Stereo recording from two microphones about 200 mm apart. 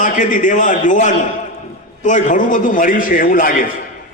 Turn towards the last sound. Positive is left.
turn(degrees=45)  # may be behind; listen again after turning